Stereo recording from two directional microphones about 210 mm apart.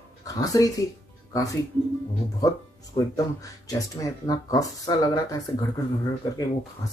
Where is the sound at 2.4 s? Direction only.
15° left (ahead or behind).